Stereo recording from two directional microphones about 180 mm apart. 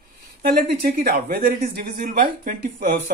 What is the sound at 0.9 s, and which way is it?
Speech, 55° right (ahead or behind).